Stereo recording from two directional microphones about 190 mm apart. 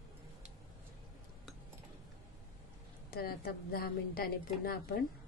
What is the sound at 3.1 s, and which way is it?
A woman's voice, 55° left (ahead or behind).